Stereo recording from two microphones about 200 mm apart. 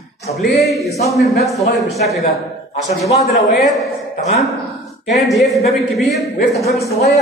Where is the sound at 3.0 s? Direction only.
35° left (ahead or behind).